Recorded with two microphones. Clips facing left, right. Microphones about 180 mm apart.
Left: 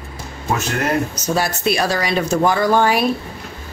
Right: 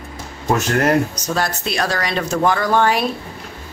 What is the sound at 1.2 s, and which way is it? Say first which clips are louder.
Speech: left 3 dB; 5° left (ahead or behind).